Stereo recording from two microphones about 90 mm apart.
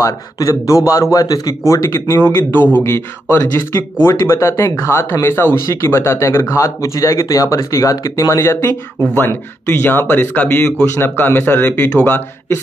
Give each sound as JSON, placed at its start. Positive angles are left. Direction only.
{"t": 0.0, "sound": "a man's voice", "side_deg": 35}
{"t": 1.7, "sound": "speech", "side_deg": 30}